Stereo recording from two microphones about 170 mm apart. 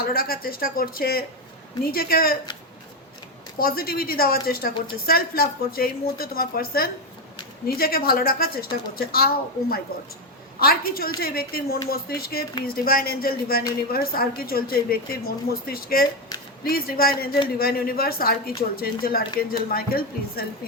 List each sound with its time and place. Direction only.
0.0 s a woman's voice: 60° left (ahead or behind)
3.6 s a woman's voice: 60° left (ahead or behind)